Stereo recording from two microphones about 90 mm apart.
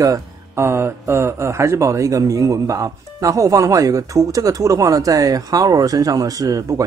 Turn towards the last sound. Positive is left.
turn(degrees=-40)  # may be behind; listen again after turning